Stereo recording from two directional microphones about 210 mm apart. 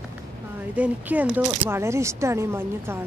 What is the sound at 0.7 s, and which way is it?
Speech, 5° right (ahead or behind).